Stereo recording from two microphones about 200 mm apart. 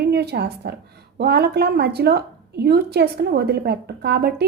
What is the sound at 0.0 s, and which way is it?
A woman's voice, 55° right (ahead or behind).